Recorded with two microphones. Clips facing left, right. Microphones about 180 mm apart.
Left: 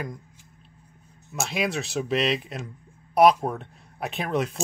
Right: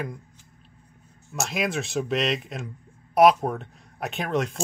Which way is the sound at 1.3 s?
Centre (ahead or behind).